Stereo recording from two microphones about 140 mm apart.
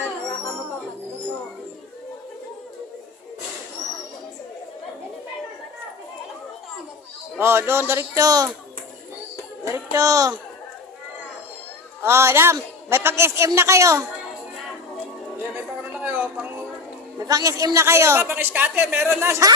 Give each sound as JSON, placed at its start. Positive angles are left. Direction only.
{"t": 7.3, "sound": "a man's voice", "side_deg": -15}
{"t": 9.7, "sound": "a man's voice", "side_deg": -20}
{"t": 12.0, "sound": "a man's voice", "side_deg": -20}
{"t": 15.5, "sound": "a sound", "side_deg": -10}
{"t": 17.2, "sound": "a man's voice", "side_deg": -25}